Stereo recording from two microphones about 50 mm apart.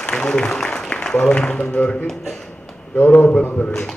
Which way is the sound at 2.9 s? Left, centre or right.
Left.